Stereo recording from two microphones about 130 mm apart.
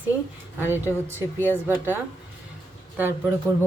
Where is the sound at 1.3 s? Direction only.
15° left (ahead or behind).